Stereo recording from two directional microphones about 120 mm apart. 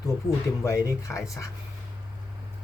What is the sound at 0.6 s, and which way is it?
Speech, 25° left (ahead or behind).